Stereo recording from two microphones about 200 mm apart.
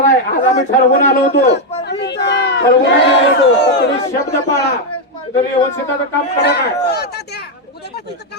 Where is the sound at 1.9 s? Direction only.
60° left (ahead or behind).